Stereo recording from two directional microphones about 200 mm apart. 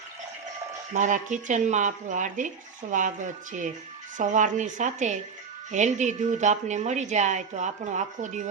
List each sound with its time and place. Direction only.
0.9 s a woman's voice: 40° right (ahead or behind)